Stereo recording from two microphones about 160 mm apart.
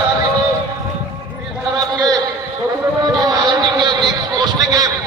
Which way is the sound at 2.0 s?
25° right (ahead or behind).